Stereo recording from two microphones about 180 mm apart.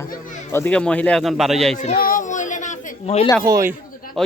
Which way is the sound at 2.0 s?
50° left (ahead or behind).